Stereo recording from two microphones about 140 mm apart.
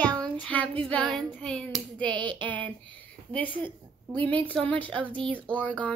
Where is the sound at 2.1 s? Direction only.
35° right (ahead or behind).